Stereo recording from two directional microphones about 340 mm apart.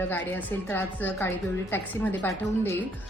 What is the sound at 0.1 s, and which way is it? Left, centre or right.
Speech, centre.